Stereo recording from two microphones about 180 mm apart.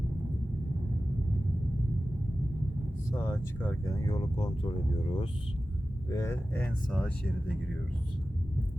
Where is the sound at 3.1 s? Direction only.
15° left (ahead or behind).